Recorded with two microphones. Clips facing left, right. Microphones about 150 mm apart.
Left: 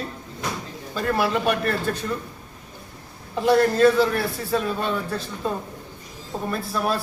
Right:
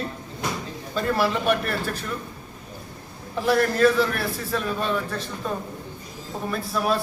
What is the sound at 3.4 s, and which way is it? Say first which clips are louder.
Speech: left 3 dB; 25° left (ahead or behind).